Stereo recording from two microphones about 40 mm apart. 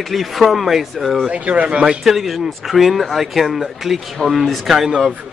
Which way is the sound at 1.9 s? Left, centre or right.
Centre.